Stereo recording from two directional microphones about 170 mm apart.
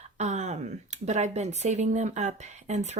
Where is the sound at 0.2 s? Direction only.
40° right (ahead or behind).